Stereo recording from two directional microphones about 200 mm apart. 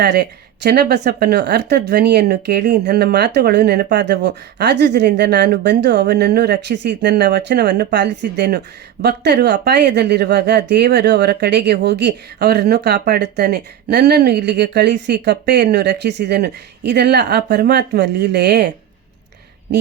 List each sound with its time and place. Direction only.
0.0 s speech: 55° right (ahead or behind)